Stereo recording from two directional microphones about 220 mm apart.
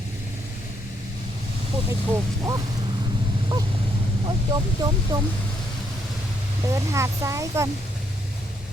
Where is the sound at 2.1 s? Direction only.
15° right (ahead or behind).